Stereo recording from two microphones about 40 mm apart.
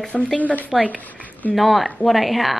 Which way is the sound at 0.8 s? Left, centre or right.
Left.